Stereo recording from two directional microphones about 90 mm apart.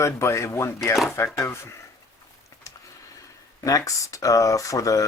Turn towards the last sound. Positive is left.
turn(degrees=40)  # may be behind; listen again after turning